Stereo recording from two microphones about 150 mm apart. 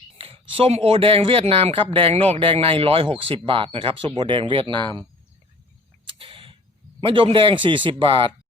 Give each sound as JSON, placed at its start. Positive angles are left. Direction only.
{"t": 0.2, "sound": "speech", "side_deg": -40}
{"t": 6.1, "sound": "a sound", "side_deg": -35}
{"t": 7.0, "sound": "speech", "side_deg": -35}